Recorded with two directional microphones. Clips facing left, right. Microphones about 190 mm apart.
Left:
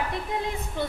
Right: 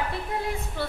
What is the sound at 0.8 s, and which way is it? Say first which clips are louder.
Speech: left 3 dB; 20° left (ahead or behind).